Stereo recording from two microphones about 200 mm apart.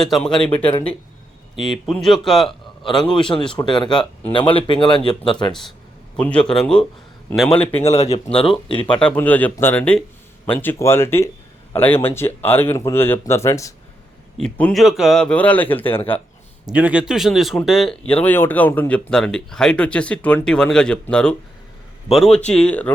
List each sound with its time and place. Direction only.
0.0 s speech: centre (ahead or behind)
1.7 s speech: centre (ahead or behind)
3.2 s speech: 25° left (ahead or behind)
6.1 s speech: 5° left (ahead or behind)
7.7 s speech: 30° left (ahead or behind)
9.0 s speech: 5° left (ahead or behind)
14.3 s speech: 5° left (ahead or behind)
16.0 s speech: 30° left (ahead or behind)
16.7 s speech: 5° right (ahead or behind)